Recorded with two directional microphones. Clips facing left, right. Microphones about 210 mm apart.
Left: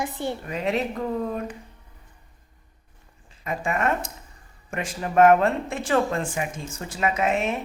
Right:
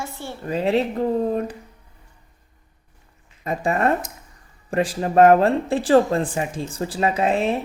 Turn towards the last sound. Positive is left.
turn(degrees=-30)  # may be behind; listen again after turning